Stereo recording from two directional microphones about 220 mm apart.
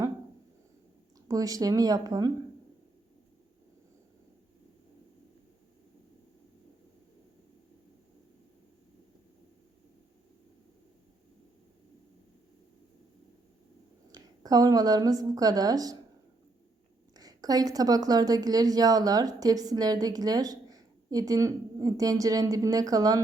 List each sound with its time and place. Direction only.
1.3 s a woman's voice: 15° right (ahead or behind)
14.1 s a woman's voice: 15° right (ahead or behind)
17.2 s a woman's voice: 15° right (ahead or behind)